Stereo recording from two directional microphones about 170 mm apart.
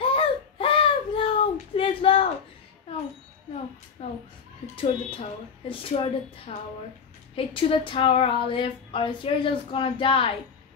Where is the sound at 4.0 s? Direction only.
40° left (ahead or behind).